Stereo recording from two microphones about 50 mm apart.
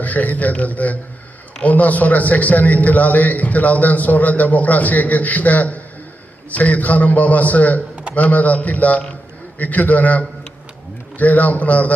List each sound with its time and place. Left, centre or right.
0.0 s a man's voice: left